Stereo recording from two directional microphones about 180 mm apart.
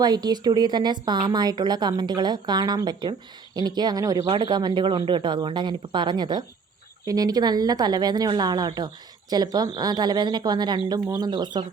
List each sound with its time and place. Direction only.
0.0 s a woman's voice: 20° right (ahead or behind)